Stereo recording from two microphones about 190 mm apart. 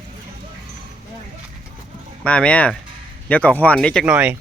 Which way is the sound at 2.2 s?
5° left (ahead or behind).